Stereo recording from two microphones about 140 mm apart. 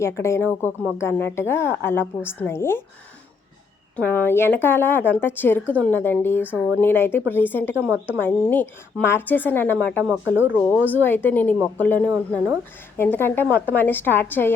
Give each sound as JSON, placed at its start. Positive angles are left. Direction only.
{"t": 0.0, "sound": "a woman's voice", "side_deg": 20}
{"t": 3.9, "sound": "a woman's voice", "side_deg": 15}
{"t": 7.8, "sound": "a woman's voice", "side_deg": -15}
{"t": 8.2, "sound": "a woman's voice", "side_deg": 10}